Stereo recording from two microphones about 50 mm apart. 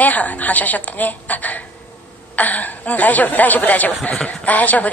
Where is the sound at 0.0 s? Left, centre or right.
Left.